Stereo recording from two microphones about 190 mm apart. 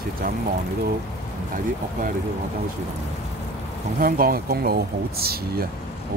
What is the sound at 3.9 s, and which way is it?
Speech, 50° right (ahead or behind).